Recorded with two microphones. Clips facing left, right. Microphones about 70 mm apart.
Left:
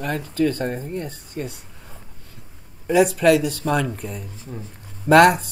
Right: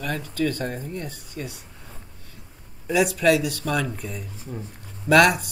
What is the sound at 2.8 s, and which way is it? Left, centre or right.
Speech, left.